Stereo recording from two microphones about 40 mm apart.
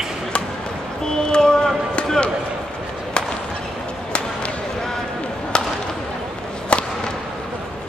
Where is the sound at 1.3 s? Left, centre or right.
Centre.